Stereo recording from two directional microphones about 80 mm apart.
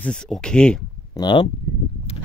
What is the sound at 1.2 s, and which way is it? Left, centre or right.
Speech, left.